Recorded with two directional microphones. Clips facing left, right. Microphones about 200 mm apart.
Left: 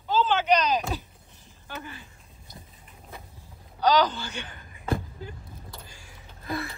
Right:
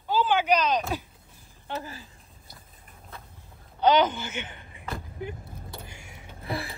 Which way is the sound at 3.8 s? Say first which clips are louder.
Right 1 dB; 20° right (ahead or behind).